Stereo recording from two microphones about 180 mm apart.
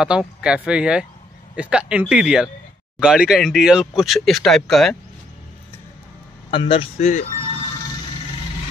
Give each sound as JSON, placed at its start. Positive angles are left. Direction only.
{"t": 0.0, "sound": "speech", "side_deg": -5}
{"t": 6.5, "sound": "speech", "side_deg": 30}